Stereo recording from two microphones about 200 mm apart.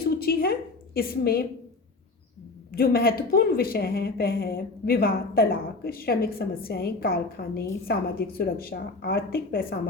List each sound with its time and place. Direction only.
0.0 s a sound: 50° left (ahead or behind)
0.9 s a woman's voice: 50° left (ahead or behind)
2.7 s a woman's voice: 50° left (ahead or behind)